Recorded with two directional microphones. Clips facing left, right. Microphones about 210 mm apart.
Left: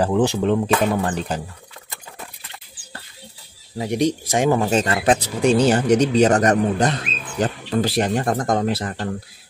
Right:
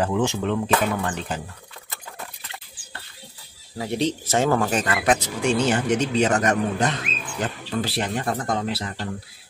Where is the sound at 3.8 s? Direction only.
15° left (ahead or behind); by 9.0 s 50° left (ahead or behind).